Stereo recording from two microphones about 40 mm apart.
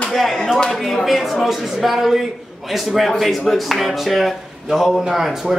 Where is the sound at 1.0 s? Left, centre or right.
Centre.